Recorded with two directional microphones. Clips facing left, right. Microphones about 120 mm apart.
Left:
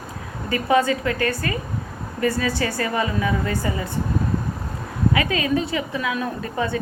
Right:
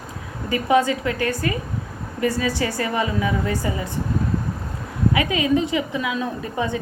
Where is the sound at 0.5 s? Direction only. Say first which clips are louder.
Right 1 dB; 15° right (ahead or behind).